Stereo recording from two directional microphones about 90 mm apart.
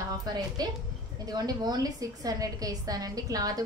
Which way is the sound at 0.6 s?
50° right (ahead or behind).